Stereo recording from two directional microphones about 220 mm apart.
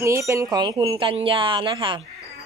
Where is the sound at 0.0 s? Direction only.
15° right (ahead or behind).